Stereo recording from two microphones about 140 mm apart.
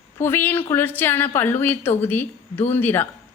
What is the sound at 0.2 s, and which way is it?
A woman's voice, 15° left (ahead or behind).